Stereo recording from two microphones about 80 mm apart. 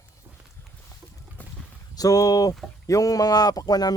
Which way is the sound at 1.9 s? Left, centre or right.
Left.